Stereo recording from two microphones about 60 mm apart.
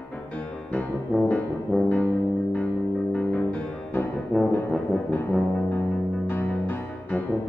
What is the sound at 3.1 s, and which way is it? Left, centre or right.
Music, left.